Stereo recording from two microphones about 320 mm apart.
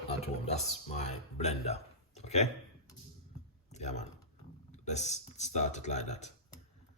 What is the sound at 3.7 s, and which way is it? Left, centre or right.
Typing, left.